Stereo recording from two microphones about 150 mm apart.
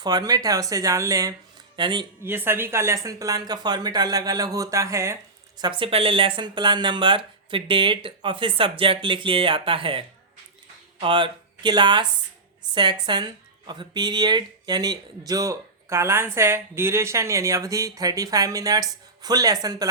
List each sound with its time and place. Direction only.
0.0 s speech: 25° right (ahead or behind)
2.2 s speech: 15° right (ahead or behind)
5.5 s speech: 30° right (ahead or behind)
11.0 s speech: 30° right (ahead or behind)